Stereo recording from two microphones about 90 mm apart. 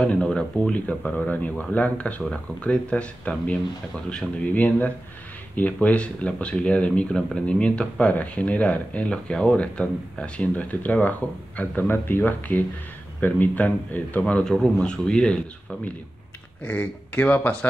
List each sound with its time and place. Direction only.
0.0 s a man's voice: 10° left (ahead or behind)
14.2 s speech: 10° left (ahead or behind)
16.6 s a man's voice: 20° left (ahead or behind)